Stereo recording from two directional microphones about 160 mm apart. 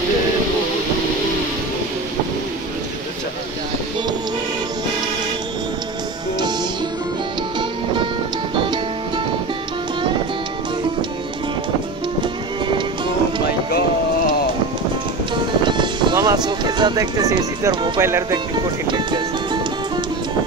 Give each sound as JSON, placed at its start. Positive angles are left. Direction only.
{"t": 12.2, "sound": "music", "side_deg": -30}
{"t": 15.6, "sound": "music", "side_deg": -30}
{"t": 18.0, "sound": "speech", "side_deg": -15}
{"t": 18.5, "sound": "speech", "side_deg": -30}